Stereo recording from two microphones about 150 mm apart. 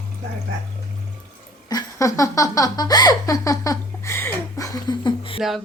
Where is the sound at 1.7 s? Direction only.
25° left (ahead or behind).